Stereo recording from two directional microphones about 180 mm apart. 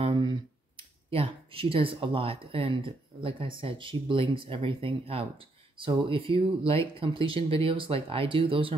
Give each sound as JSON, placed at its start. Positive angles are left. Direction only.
{"t": 0.0, "sound": "speech", "side_deg": -25}